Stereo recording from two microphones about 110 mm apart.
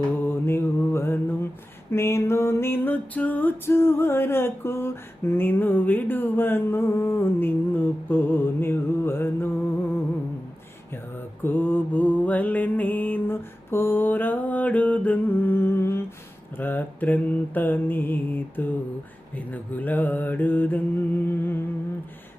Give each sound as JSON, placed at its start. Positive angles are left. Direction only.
{"t": 0.2, "sound": "mantra", "side_deg": 20}
{"t": 1.9, "sound": "music", "side_deg": 25}
{"t": 10.9, "sound": "mantra", "side_deg": 20}